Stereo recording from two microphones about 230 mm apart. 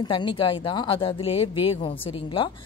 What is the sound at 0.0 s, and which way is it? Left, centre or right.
A woman's voice, left.